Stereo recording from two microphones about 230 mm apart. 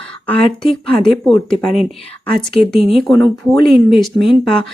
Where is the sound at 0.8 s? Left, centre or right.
Centre.